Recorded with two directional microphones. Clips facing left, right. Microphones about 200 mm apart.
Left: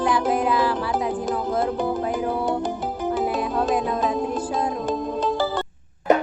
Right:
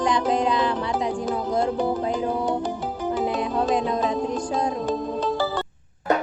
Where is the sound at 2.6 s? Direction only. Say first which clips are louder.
Left 1 dB; 50° left (ahead or behind).